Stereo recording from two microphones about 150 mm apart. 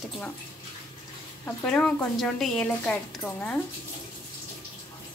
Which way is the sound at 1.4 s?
5° left (ahead or behind).